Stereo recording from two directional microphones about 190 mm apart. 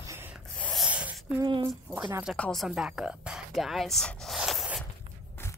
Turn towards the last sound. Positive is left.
turn(degrees=0)  # may be behind; listen again after turning